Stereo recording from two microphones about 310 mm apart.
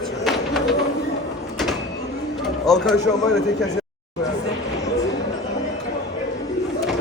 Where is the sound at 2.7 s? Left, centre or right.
Centre.